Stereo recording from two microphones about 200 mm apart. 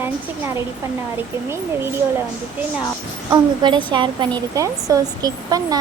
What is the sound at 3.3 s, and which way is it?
A woman's voice, 20° right (ahead or behind).